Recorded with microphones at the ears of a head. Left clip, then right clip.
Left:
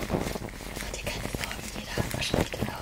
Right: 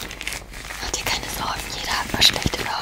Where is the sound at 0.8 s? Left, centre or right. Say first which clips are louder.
Right 10 dB; right.